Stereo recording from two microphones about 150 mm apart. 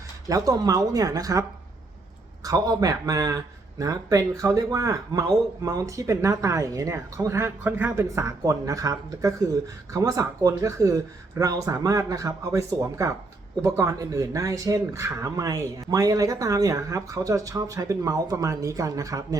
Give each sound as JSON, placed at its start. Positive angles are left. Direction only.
{"t": 0.3, "sound": "speech", "side_deg": -25}